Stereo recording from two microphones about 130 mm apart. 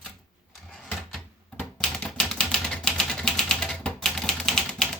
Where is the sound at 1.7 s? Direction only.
5° left (ahead or behind).